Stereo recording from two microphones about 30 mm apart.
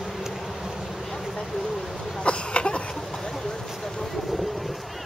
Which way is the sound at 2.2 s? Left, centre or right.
Left.